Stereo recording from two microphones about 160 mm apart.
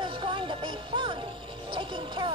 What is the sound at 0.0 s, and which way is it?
Music, 30° right (ahead or behind).